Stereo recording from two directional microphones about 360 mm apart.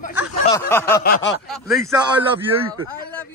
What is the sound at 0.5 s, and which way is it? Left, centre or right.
A man's voice, centre.